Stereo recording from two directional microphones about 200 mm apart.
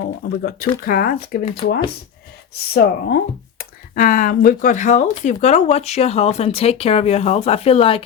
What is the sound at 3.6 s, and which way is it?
Speech, 45° left (ahead or behind).